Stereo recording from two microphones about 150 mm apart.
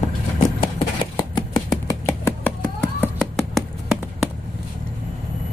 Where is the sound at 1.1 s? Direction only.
25° left (ahead or behind); by 4.3 s centre (ahead or behind).